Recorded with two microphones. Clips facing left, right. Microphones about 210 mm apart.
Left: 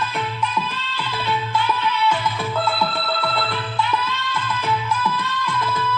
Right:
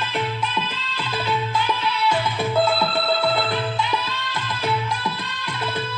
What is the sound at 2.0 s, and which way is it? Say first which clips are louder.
Music: even; 10° right (ahead or behind).